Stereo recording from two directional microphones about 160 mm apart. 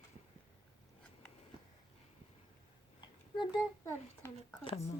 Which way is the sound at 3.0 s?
30° left (ahead or behind).